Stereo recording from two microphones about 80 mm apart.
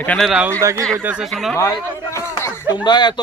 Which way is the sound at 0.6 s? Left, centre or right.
Right.